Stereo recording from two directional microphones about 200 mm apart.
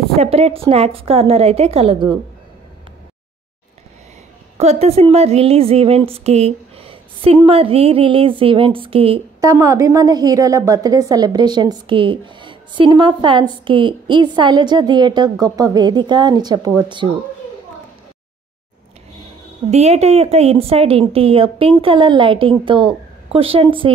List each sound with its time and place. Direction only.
0.2 s a woman's voice: 30° right (ahead or behind)
4.6 s a woman's voice: 30° right (ahead or behind)
9.5 s a woman's voice: 15° right (ahead or behind)
19.7 s a woman's voice: 30° right (ahead or behind)